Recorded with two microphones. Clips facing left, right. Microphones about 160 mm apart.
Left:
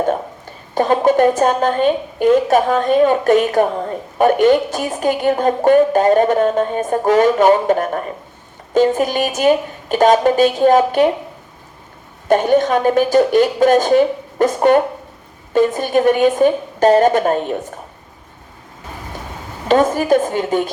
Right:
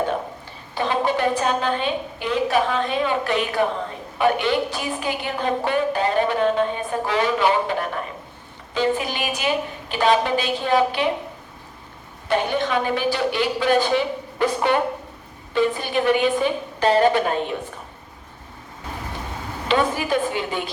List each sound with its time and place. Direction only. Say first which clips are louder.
0.7 s a woman's voice: left 8 dB; 45° left (ahead or behind)
12.3 s a woman's voice: left 8 dB; 45° left (ahead or behind)
19.6 s a woman's voice: left 7 dB; 45° left (ahead or behind)